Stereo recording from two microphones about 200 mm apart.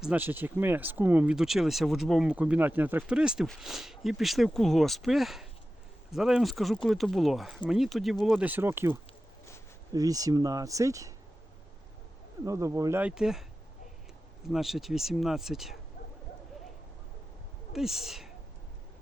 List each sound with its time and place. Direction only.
0.0 s speech: 10° right (ahead or behind)
12.5 s speech: 15° right (ahead or behind)
14.4 s speech: centre (ahead or behind)
17.7 s speech: centre (ahead or behind)